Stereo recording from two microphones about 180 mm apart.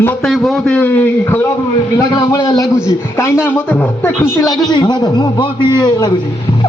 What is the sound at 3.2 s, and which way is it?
A man's voice, 15° left (ahead or behind).